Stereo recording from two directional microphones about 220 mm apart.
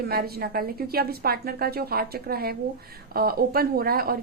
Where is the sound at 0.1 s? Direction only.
45° right (ahead or behind).